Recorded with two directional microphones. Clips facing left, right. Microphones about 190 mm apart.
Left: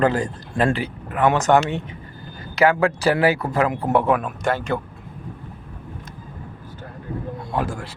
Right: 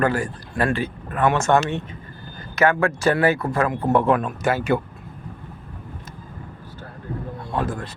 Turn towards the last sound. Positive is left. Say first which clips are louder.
# even
turn(degrees=15)  # may be behind; listen again after turning